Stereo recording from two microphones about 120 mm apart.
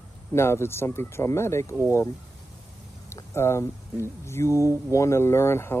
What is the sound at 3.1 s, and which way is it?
Speech, 20° left (ahead or behind).